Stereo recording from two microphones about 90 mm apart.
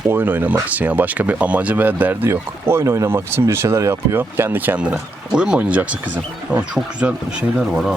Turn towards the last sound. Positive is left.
turn(degrees=-10)  # may be behind; listen again after turning